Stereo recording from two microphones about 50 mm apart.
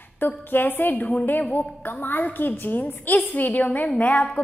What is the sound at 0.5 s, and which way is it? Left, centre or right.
A woman's voice, left.